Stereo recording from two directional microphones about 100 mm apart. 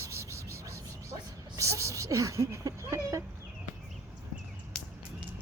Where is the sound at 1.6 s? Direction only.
30° right (ahead or behind).